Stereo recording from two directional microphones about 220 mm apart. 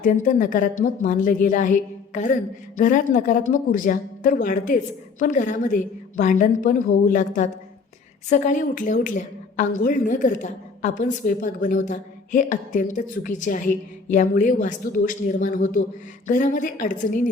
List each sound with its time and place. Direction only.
0.0 s a woman's voice: 35° left (ahead or behind)